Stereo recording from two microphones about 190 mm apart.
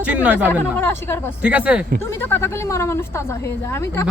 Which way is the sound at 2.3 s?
15° left (ahead or behind).